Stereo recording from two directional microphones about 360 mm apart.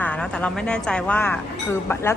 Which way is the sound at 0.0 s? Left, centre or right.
Centre.